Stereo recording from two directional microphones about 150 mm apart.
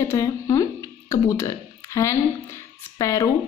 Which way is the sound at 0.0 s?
20° left (ahead or behind).